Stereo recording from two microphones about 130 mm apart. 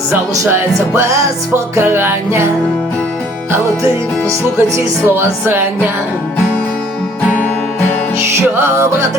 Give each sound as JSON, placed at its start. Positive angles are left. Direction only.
{"t": 0.3, "sound": "music", "side_deg": -25}
{"t": 5.0, "sound": "music", "side_deg": -15}
{"t": 8.4, "sound": "music", "side_deg": -20}